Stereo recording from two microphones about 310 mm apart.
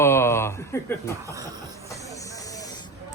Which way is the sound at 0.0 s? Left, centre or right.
Centre.